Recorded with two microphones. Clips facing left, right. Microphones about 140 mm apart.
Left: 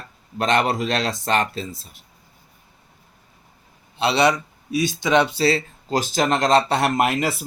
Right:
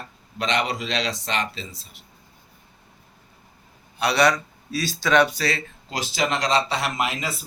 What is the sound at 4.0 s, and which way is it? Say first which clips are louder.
Speech: left 1 dB; 25° left (ahead or behind).